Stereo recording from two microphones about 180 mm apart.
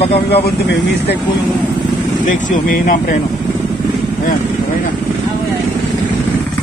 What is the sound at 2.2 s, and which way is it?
Speech, 45° left (ahead or behind).